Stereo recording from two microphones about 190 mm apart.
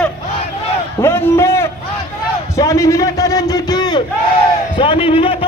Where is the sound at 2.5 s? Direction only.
15° left (ahead or behind).